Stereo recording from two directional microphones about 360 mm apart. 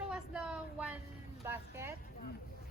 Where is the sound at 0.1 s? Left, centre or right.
Centre.